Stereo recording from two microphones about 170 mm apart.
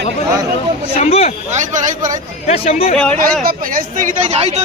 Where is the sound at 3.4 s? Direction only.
55° right (ahead or behind); by 4.6 s 40° right (ahead or behind).